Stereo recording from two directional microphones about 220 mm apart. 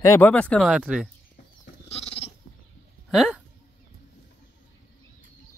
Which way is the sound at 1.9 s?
25° left (ahead or behind).